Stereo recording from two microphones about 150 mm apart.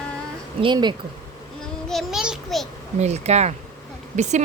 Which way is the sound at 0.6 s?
30° right (ahead or behind).